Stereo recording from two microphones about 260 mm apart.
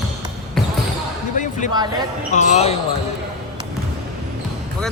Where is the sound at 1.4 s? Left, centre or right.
Left.